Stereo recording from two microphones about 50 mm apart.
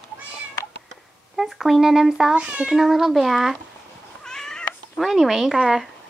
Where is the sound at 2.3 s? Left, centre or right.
Right.